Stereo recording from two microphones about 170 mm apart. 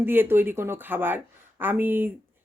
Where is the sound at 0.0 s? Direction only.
10° right (ahead or behind).